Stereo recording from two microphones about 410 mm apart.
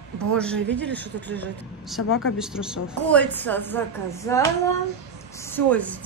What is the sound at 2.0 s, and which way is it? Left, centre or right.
Speech, left.